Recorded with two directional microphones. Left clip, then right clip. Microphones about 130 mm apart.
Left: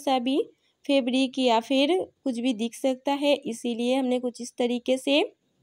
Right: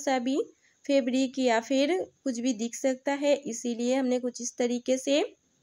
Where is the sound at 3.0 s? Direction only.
25° right (ahead or behind).